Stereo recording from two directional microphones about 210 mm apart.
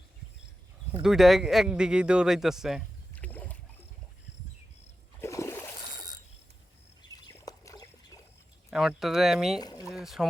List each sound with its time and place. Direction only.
1.0 s speech: centre (ahead or behind)
5.2 s splash: 15° left (ahead or behind)
7.4 s trickle: 15° left (ahead or behind)
8.7 s speech: centre (ahead or behind)
9.6 s speech: 20° left (ahead or behind)
9.9 s speech: centre (ahead or behind)